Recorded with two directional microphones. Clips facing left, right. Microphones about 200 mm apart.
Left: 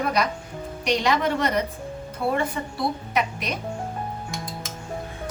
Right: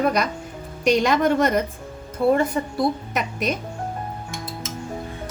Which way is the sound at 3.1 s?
45° right (ahead or behind).